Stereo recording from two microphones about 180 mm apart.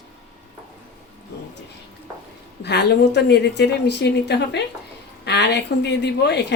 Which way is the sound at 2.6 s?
65° left (ahead or behind).